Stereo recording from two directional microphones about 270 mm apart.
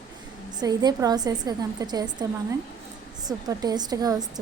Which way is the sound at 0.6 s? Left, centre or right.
Centre.